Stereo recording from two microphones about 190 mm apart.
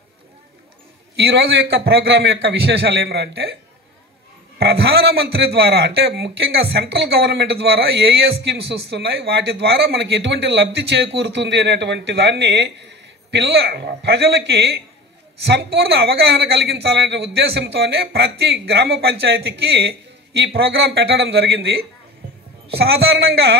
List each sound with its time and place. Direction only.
1.1 s a man's voice: 60° right (ahead or behind)
4.6 s a man's voice: 55° right (ahead or behind)
22.8 s a man's voice: 55° right (ahead or behind)